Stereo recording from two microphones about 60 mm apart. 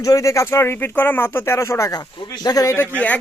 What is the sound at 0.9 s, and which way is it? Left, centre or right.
Speech, left.